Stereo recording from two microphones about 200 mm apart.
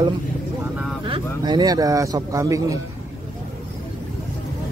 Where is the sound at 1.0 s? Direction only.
25° right (ahead or behind).